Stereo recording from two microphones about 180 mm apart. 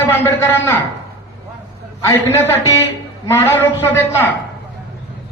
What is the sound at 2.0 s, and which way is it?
A man's voice, 15° left (ahead or behind).